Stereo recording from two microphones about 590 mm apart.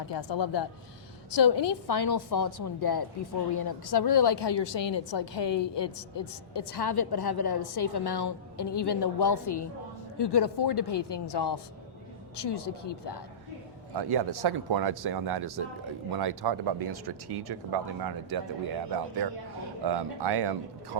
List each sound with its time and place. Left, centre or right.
0.1 s a woman's voice: left
13.9 s speech: right